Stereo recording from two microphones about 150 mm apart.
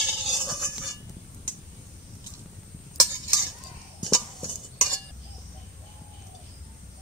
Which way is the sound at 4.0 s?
5° left (ahead or behind).